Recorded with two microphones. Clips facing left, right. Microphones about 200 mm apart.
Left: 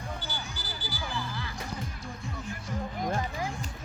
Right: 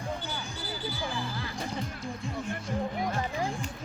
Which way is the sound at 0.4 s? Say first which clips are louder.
Right 5 dB; 25° right (ahead or behind).